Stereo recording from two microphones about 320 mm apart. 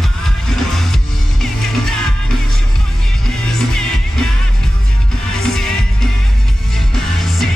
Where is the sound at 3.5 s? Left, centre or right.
Centre.